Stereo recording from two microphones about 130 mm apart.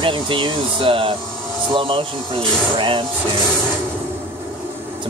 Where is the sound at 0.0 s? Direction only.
40° right (ahead or behind).